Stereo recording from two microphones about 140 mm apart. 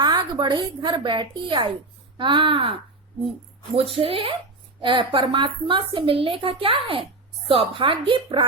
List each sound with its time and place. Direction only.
0.0 s a woman's voice: 30° right (ahead or behind)
3.8 s a woman's voice: 40° right (ahead or behind)